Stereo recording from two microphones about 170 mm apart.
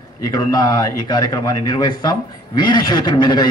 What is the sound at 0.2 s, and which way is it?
A man's voice, 25° left (ahead or behind).